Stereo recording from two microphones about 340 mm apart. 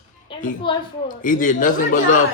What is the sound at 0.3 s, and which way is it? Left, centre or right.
A man's voice, centre.